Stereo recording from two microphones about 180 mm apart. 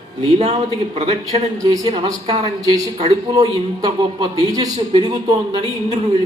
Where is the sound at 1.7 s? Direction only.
20° right (ahead or behind).